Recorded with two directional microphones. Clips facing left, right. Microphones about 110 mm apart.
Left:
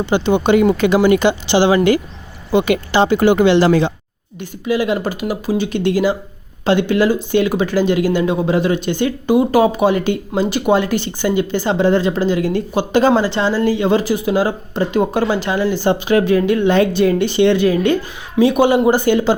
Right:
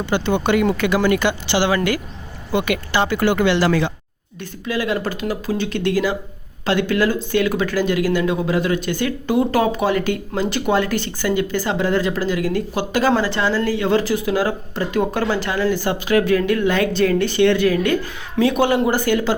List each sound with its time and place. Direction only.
0.0 s speech: 20° left (ahead or behind)
4.4 s speech: 15° left (ahead or behind)